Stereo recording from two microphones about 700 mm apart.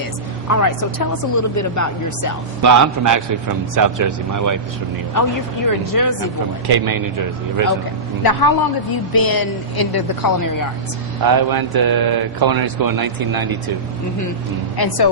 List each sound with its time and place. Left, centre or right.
0.4 s speech: left
2.6 s a man's voice: right
5.2 s speech: left
6.7 s a man's voice: right
8.2 s a woman's voice: left
11.3 s a man's voice: right
14.8 s a woman's voice: left